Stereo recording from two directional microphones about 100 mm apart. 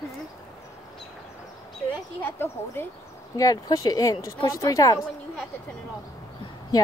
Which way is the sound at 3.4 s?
35° left (ahead or behind).